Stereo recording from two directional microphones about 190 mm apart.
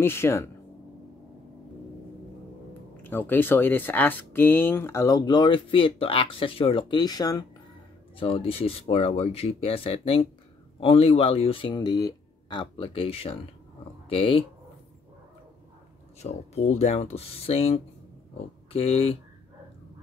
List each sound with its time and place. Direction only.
0.0 s speech: 10° left (ahead or behind)
3.0 s speech: 10° left (ahead or behind)
8.2 s speech: 30° left (ahead or behind)
16.2 s speech: 35° left (ahead or behind)